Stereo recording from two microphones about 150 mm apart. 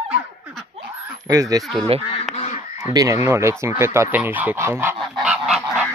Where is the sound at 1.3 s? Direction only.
20° right (ahead or behind).